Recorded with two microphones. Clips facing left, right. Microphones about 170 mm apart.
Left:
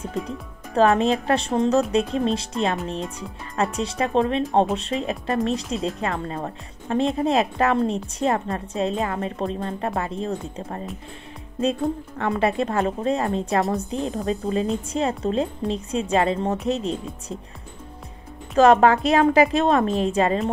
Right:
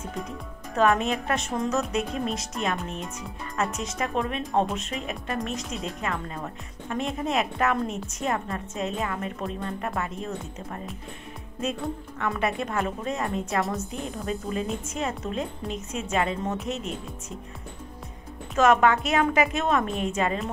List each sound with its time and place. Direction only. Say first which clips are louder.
0.7 s a woman's voice: left 5 dB; 30° left (ahead or behind)
12.2 s a woman's voice: left 5 dB; 30° left (ahead or behind)
18.6 s a woman's voice: left 5 dB; 35° left (ahead or behind)